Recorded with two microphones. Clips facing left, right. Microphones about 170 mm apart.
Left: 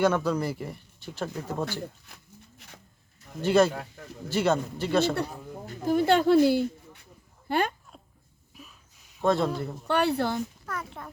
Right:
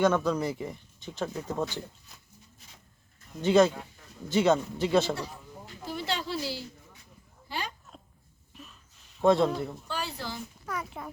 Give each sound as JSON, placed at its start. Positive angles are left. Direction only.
{"t": 0.0, "sound": "speech", "side_deg": 10}
{"t": 3.4, "sound": "speech", "side_deg": 5}
{"t": 3.7, "sound": "speech", "side_deg": 65}
{"t": 4.3, "sound": "speech", "side_deg": 5}
{"t": 5.1, "sound": "speech", "side_deg": 55}
{"t": 9.1, "sound": "speech", "side_deg": 0}
{"t": 9.8, "sound": "speech", "side_deg": 65}
{"t": 10.7, "sound": "speech", "side_deg": -10}